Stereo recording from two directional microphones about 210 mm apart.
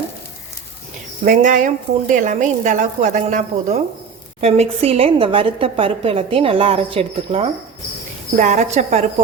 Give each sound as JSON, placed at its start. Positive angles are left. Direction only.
{"t": 1.2, "sound": "a woman's voice", "side_deg": -35}